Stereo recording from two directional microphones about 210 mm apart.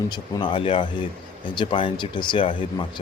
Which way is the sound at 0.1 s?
20° left (ahead or behind).